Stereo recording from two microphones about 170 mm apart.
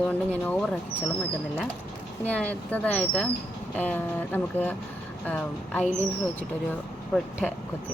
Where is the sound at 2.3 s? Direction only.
10° left (ahead or behind).